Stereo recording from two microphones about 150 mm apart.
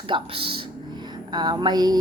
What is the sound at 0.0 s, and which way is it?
Speech, 35° right (ahead or behind).